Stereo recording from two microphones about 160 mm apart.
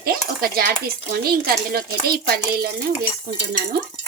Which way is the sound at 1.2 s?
70° right (ahead or behind).